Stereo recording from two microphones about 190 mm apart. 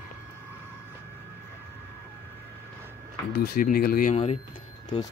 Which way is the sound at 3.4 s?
50° left (ahead or behind).